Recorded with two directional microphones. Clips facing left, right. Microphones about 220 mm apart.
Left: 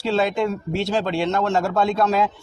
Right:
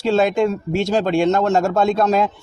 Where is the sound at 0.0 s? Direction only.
45° right (ahead or behind).